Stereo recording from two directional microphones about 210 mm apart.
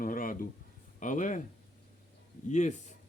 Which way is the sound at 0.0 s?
40° left (ahead or behind).